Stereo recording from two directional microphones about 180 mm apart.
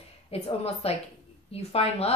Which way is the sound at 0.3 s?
35° left (ahead or behind).